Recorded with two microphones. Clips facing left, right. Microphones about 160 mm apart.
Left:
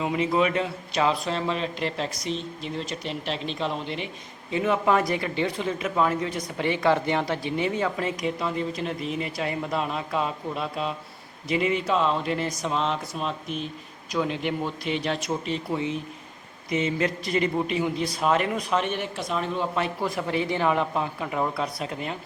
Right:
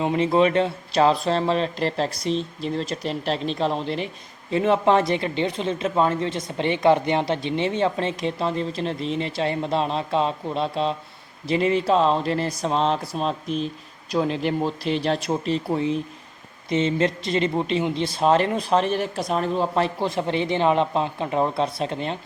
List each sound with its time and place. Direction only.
0.0 s speech: 30° right (ahead or behind)